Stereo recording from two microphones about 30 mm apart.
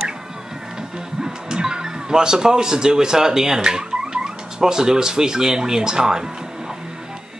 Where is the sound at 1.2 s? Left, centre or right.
Right.